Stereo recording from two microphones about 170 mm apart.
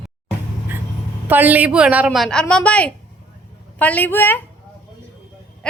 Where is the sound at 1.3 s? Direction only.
10° right (ahead or behind); by 4.4 s 10° left (ahead or behind).